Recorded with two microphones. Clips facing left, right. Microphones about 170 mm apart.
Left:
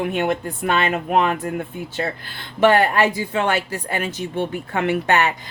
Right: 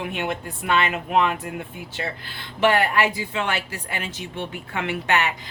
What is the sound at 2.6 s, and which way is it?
Speech, 45° left (ahead or behind).